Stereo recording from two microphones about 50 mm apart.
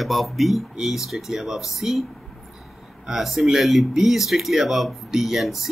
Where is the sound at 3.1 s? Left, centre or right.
Centre.